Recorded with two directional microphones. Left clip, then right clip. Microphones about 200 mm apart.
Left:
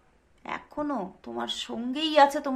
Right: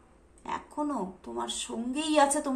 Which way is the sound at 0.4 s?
30° left (ahead or behind).